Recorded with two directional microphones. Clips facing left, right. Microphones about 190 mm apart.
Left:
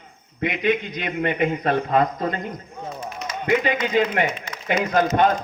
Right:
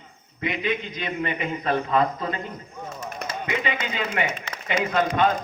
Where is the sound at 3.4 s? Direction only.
45° left (ahead or behind).